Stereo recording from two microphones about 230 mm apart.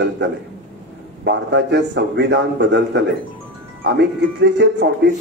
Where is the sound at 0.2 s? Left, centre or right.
Right.